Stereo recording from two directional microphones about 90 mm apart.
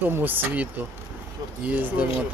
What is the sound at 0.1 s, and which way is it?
Speech, 20° right (ahead or behind).